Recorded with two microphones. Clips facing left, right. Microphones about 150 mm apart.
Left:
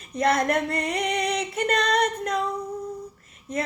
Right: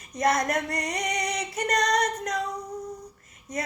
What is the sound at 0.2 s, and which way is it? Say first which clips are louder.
Female singing: left 2 dB; 25° left (ahead or behind).